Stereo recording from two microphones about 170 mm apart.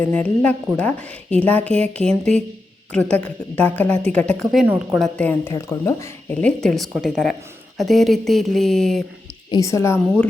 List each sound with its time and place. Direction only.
0.1 s a woman's voice: 5° left (ahead or behind)
4.5 s speech: 10° right (ahead or behind)
4.9 s speech: 5° left (ahead or behind)
9.5 s a woman's voice: 20° left (ahead or behind)